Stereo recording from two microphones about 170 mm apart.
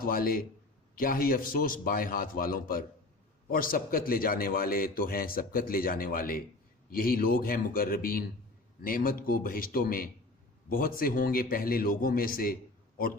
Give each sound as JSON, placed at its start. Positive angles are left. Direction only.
{"t": 0.0, "sound": "a man's voice", "side_deg": 60}